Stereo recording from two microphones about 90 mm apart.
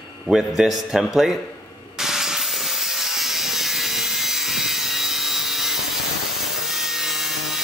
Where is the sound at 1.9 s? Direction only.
5° right (ahead or behind).